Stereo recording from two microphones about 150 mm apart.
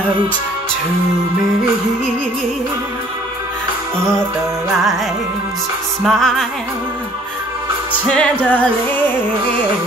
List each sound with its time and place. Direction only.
6.0 s music: 5° left (ahead or behind)
8.1 s music: 10° left (ahead or behind)